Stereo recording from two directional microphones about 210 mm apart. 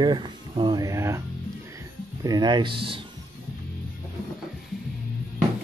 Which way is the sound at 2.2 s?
20° right (ahead or behind).